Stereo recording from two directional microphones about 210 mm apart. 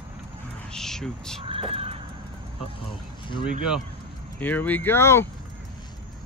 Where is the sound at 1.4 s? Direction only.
25° right (ahead or behind).